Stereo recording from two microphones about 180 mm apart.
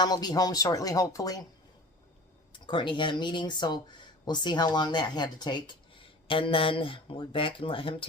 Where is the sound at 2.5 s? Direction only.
25° left (ahead or behind).